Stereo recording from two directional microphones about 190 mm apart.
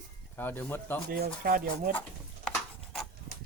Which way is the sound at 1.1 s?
50° right (ahead or behind).